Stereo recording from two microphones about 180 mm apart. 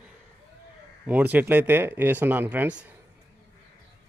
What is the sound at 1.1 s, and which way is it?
Speech, 10° right (ahead or behind).